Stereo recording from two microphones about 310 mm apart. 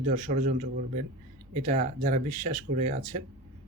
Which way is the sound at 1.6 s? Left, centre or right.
Right.